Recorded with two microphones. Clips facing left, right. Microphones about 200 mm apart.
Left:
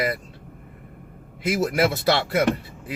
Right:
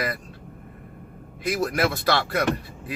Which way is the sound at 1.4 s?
20° left (ahead or behind).